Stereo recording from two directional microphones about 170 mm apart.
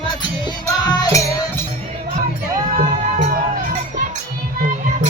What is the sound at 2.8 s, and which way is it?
Music, 45° right (ahead or behind).